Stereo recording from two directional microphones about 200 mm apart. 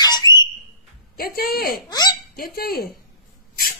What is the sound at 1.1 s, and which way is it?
Speech, 50° left (ahead or behind).